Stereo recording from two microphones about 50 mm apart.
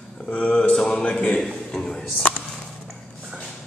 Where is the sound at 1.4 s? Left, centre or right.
Centre.